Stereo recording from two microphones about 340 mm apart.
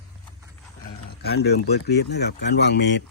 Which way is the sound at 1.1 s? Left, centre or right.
Left.